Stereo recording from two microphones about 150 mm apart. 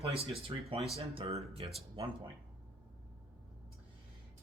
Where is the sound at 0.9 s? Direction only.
40° right (ahead or behind).